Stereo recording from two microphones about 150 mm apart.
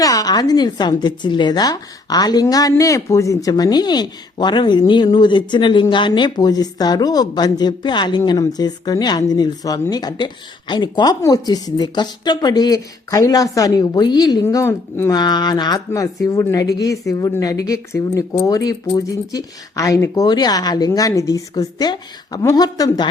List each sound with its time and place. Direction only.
0.0 s speech: 25° left (ahead or behind)